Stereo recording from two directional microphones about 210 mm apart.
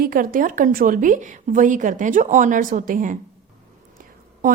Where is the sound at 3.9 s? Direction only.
40° right (ahead or behind).